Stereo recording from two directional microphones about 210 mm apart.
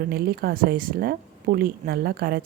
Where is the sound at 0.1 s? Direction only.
45° right (ahead or behind).